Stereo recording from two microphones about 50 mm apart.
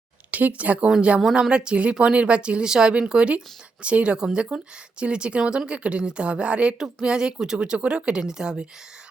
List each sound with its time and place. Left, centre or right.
0.3 s speech: right
1.4 s speech: centre